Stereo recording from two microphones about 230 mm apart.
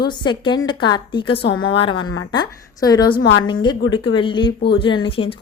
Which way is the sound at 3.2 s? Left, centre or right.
Left.